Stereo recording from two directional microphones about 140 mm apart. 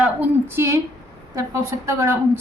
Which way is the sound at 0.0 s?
15° right (ahead or behind).